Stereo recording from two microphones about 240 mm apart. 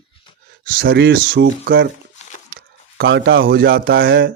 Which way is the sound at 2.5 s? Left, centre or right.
Right.